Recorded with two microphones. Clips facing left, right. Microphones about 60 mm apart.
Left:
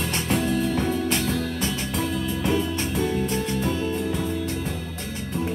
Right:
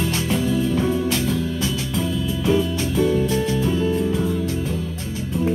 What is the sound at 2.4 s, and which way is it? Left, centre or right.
Music, left.